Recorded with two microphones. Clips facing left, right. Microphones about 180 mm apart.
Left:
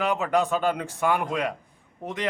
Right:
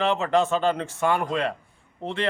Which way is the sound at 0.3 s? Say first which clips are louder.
Right 1 dB; 10° left (ahead or behind).